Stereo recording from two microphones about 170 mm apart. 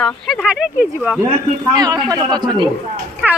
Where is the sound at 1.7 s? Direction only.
20° right (ahead or behind).